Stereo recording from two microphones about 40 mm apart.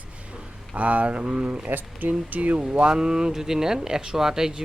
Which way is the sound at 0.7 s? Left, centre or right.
Right.